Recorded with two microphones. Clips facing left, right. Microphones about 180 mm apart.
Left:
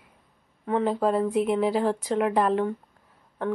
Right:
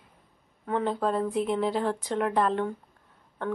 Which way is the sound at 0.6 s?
5° left (ahead or behind).